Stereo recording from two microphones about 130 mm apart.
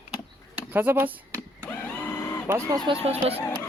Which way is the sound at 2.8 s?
45° right (ahead or behind).